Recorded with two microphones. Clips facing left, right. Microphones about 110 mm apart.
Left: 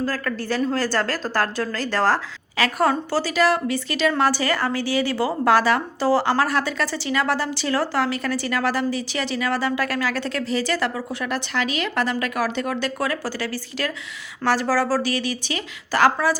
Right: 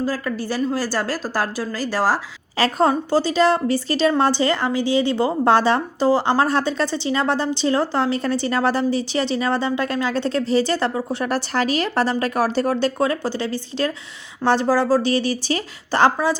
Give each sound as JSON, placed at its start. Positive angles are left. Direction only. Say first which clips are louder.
{"t": 0.0, "sound": "a woman's voice", "louder": "right 2 dB", "side_deg": -15}
{"t": 2.6, "sound": "a woman's voice", "louder": "right 2 dB", "side_deg": -30}
{"t": 15.1, "sound": "a woman's voice", "louder": "right 5 dB", "side_deg": -35}